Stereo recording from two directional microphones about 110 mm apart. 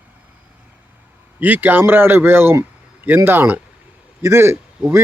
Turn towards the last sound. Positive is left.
turn(degrees=-20)  # may be behind; listen again after turning